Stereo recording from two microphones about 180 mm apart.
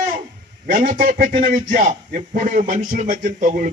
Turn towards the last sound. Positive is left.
turn(degrees=-45)  # may be behind; listen again after turning